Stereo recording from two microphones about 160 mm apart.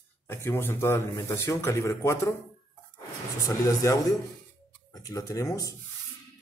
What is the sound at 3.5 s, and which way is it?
A man's voice, 20° left (ahead or behind).